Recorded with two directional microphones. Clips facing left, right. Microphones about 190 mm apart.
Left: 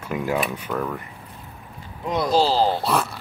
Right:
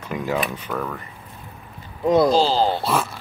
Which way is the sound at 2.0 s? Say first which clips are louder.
Right 8 dB; 35° right (ahead or behind).